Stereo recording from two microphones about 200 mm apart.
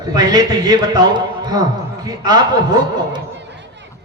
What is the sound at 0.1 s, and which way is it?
A man's voice, 20° right (ahead or behind).